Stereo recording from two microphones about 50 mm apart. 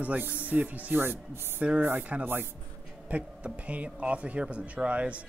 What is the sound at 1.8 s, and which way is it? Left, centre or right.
Speech, right.